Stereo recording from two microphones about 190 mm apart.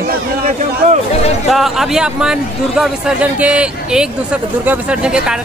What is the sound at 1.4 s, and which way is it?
A man's voice, centre (ahead or behind).